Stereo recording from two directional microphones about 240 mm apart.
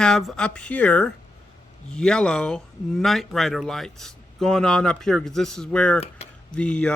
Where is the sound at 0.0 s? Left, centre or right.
Centre.